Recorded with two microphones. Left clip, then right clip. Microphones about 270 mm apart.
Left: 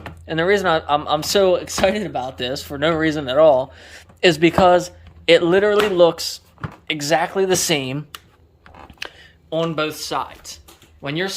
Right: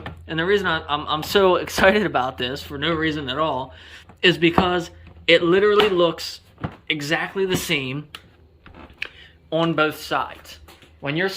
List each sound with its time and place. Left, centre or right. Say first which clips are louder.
0.3 s speech: left 3 dB; centre
2.4 s speech: left 4 dB; centre
9.0 s a sound: right 1 dB; left
9.5 s speech: right 1 dB; centre